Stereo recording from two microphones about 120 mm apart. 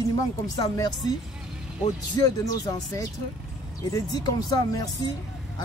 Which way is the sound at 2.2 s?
30° left (ahead or behind).